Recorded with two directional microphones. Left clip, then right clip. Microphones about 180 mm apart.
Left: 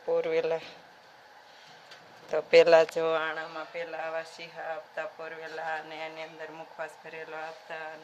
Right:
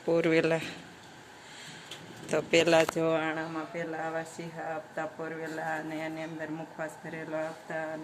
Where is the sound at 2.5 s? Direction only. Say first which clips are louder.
Left 5 dB; 55° left (ahead or behind).